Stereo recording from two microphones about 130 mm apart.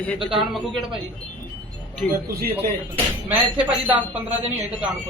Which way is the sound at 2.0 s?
5° left (ahead or behind).